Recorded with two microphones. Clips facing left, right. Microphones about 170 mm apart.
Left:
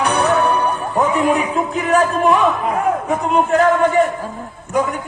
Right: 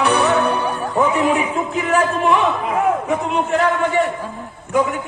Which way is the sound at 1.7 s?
40° left (ahead or behind).